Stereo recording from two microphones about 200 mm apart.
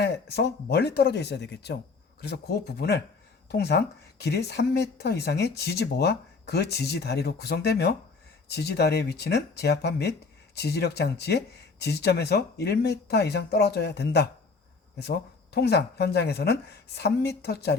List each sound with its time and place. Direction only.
0.0 s speech: 55° left (ahead or behind)